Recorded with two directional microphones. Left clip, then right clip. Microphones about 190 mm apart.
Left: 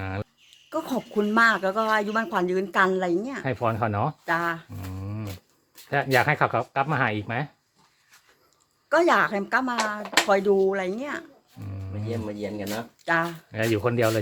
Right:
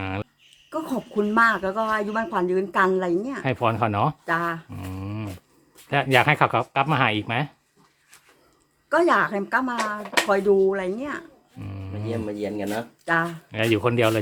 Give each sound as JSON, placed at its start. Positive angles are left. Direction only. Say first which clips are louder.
{"t": 0.0, "sound": "a sound", "louder": "right 3 dB", "side_deg": -5}
{"t": 0.7, "sound": "speech", "louder": "even", "side_deg": 10}
{"t": 4.7, "sound": "a sound", "louder": "right 4 dB", "side_deg": -10}
{"t": 5.9, "sound": "speech", "louder": "right 3 dB", "side_deg": -5}
{"t": 8.9, "sound": "speech", "louder": "right 1 dB", "side_deg": 5}
{"t": 11.6, "sound": "music", "louder": "right 3 dB", "side_deg": -10}
{"t": 13.1, "sound": "speech", "louder": "right 1 dB", "side_deg": 5}